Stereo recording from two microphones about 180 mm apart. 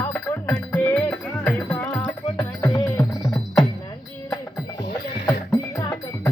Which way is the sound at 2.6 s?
20° left (ahead or behind).